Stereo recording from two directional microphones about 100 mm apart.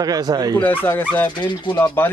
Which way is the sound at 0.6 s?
15° left (ahead or behind).